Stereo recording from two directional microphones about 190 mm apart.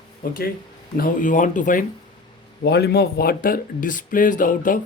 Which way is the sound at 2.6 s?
60° left (ahead or behind).